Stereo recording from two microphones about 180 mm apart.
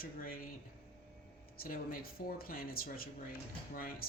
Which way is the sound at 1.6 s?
55° left (ahead or behind).